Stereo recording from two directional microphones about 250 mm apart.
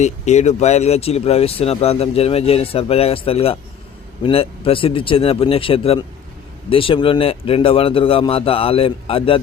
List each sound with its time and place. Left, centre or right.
0.0 s speech: left